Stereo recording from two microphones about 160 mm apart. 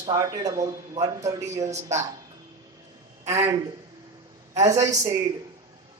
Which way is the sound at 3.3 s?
20° right (ahead or behind).